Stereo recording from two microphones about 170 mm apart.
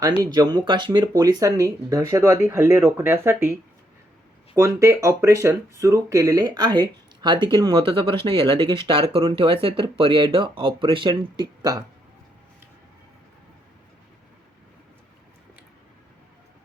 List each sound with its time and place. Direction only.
0.2 s speech: 25° right (ahead or behind)